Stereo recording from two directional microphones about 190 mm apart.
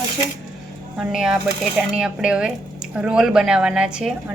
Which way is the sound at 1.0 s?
5° right (ahead or behind).